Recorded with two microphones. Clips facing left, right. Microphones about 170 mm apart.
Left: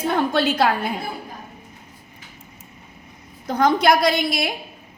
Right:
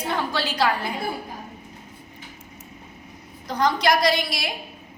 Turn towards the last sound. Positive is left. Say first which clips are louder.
# left 3 dB
turn(degrees=55)  # may be behind; listen again after turning